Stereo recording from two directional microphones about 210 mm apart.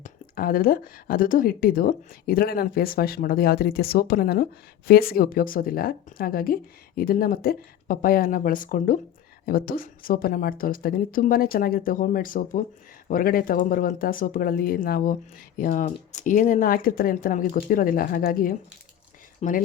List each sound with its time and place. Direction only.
0.0 s speech: 45° left (ahead or behind)